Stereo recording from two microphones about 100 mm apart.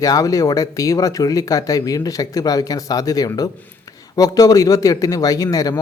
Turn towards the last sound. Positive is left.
turn(degrees=35)  # may be behind; listen again after turning